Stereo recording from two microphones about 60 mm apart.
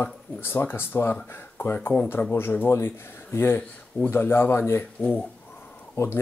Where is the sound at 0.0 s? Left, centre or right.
Left.